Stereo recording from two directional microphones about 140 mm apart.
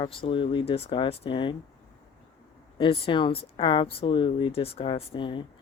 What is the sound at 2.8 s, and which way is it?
Speech, 40° left (ahead or behind).